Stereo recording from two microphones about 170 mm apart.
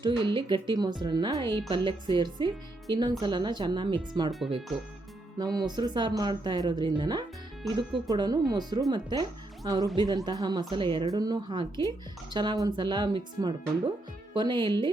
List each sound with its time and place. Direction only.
0.0 s a woman's voice: 25° right (ahead or behind)
4.3 s speech: centre (ahead or behind)
5.4 s a woman's voice: 25° right (ahead or behind)